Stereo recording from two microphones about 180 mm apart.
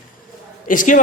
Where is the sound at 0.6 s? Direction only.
45° left (ahead or behind).